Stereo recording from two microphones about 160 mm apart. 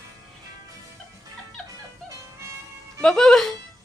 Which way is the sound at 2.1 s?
20° right (ahead or behind).